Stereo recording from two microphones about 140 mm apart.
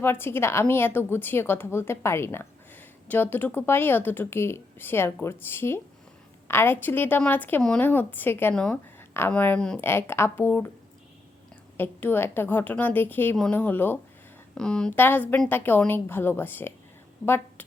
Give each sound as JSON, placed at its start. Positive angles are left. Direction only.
{"t": 0.0, "sound": "a woman's voice", "side_deg": 15}
{"t": 11.8, "sound": "a woman's voice", "side_deg": 15}